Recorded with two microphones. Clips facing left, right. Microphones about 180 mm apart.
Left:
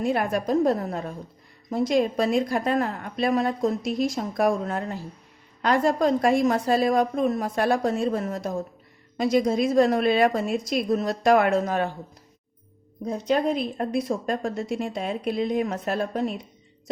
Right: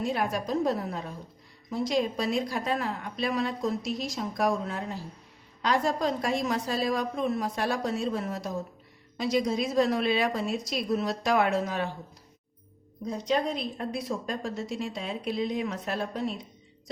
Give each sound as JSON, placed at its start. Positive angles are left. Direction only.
{"t": 0.0, "sound": "a woman's voice", "side_deg": 55}
{"t": 13.1, "sound": "a woman's voice", "side_deg": 50}